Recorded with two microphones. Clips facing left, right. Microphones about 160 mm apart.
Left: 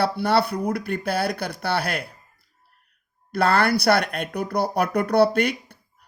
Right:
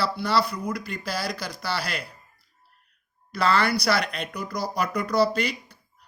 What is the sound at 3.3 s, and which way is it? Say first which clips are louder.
Speech: left 3 dB; 55° left (ahead or behind).